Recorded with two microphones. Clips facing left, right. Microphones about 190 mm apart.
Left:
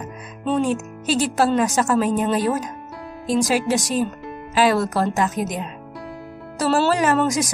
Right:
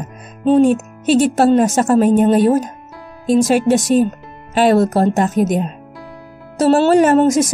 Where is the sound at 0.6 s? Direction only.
55° right (ahead or behind).